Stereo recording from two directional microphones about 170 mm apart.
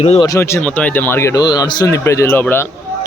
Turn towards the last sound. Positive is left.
turn(degrees=15)  # may be behind; listen again after turning